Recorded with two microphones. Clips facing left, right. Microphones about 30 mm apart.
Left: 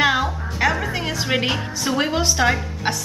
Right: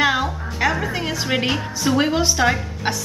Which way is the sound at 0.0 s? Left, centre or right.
Centre.